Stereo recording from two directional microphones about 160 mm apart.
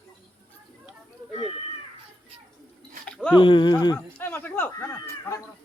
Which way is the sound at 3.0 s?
5° left (ahead or behind).